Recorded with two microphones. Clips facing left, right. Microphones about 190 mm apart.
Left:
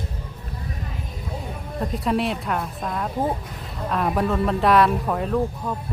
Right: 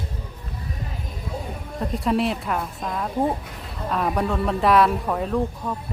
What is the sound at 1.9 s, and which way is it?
Speech, centre (ahead or behind).